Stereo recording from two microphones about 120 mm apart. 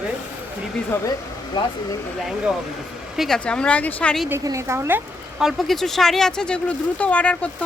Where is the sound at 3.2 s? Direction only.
5° left (ahead or behind).